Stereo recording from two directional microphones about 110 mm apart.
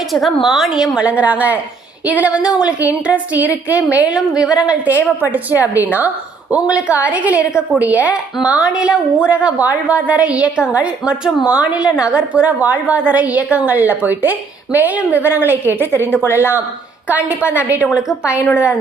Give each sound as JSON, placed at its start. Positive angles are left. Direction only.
{"t": 0.1, "sound": "a woman's voice", "side_deg": 0}